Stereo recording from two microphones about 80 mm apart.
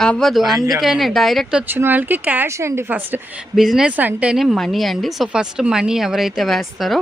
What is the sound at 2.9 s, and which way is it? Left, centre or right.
Speech, right.